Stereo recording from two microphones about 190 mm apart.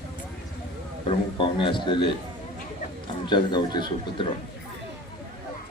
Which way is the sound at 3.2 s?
25° left (ahead or behind).